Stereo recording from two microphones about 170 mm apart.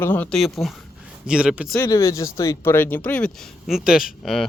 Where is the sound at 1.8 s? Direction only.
15° left (ahead or behind).